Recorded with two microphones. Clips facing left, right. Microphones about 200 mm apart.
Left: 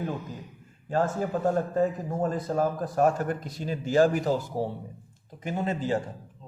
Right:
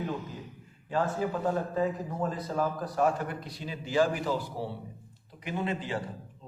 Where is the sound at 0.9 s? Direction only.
45° left (ahead or behind).